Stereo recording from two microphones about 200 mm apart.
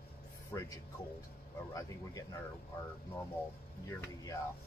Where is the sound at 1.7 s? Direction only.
15° left (ahead or behind).